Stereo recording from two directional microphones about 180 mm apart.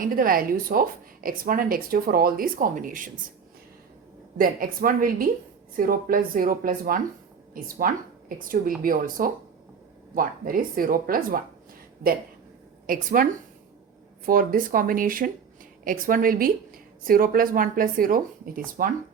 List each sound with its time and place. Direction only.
0.0 s a woman's voice: 50° right (ahead or behind)
4.4 s a woman's voice: 50° right (ahead or behind)
12.9 s a woman's voice: 50° right (ahead or behind)
14.3 s a woman's voice: 50° right (ahead or behind)